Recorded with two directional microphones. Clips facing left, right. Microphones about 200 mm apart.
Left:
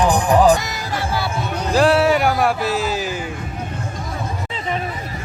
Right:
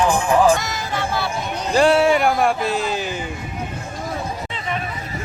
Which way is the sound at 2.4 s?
5° left (ahead or behind).